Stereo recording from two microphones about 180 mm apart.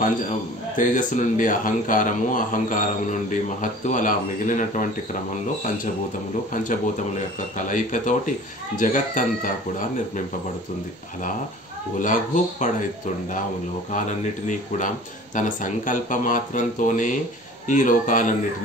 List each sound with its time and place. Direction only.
0.0 s a man's voice: 45° left (ahead or behind)
7.3 s a man's voice: 45° left (ahead or behind)
12.0 s a man's voice: 45° left (ahead or behind)
13.9 s a man's voice: 45° left (ahead or behind)